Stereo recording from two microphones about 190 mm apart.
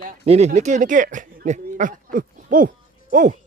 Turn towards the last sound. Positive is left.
turn(degrees=-45)  # may be behind; listen again after turning